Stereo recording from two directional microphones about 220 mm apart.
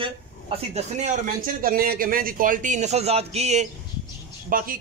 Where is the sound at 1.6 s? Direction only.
40° right (ahead or behind).